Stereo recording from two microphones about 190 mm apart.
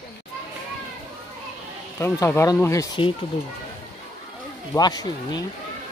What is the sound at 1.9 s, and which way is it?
Speech, 15° left (ahead or behind).